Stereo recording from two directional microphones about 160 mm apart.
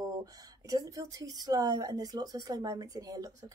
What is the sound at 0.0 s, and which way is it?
Speech, 25° right (ahead or behind).